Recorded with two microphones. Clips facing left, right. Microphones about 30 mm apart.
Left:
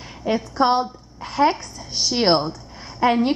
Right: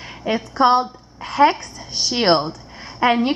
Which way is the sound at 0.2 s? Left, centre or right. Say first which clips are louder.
Right 3 dB; centre.